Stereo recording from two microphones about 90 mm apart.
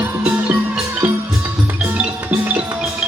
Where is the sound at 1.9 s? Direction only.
15° right (ahead or behind).